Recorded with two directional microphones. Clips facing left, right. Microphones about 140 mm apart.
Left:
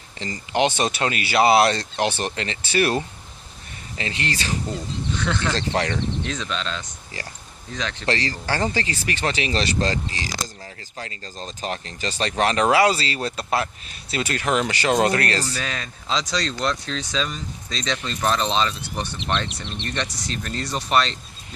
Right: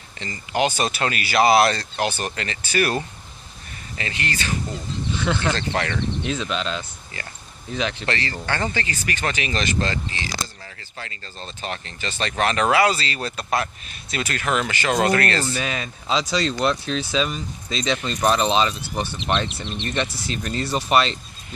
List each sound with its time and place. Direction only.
0.2 s speech: 30° left (ahead or behind)
3.9 s speech: 30° left (ahead or behind)
5.1 s speech: 5° right (ahead or behind)
5.5 s speech: 30° left (ahead or behind)
6.2 s speech: 10° right (ahead or behind)
8.0 s speech: 35° left (ahead or behind)
15.4 s speech: 10° right (ahead or behind)